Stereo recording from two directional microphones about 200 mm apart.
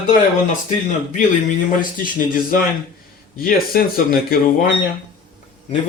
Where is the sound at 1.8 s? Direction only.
45° left (ahead or behind).